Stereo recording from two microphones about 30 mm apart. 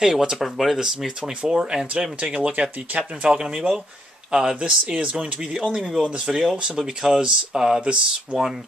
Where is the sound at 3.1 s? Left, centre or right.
Right.